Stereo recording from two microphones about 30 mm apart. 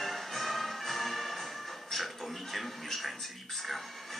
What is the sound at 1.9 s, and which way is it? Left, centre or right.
Television, centre.